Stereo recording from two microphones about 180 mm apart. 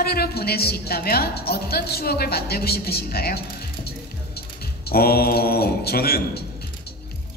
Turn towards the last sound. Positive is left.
turn(degrees=60)  # may be behind; listen again after turning